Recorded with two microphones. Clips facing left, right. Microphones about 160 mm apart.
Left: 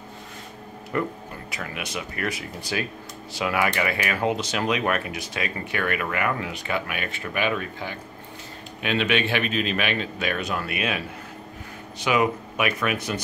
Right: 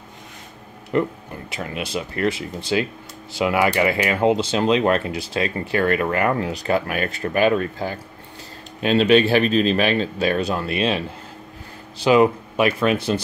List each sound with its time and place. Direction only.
0.9 s speech: 25° right (ahead or behind)